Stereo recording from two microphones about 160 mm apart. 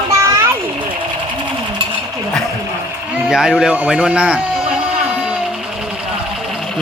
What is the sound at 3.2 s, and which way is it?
Speech, 5° right (ahead or behind).